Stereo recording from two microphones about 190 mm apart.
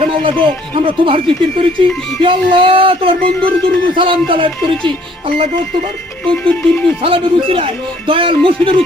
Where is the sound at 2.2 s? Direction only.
25° right (ahead or behind).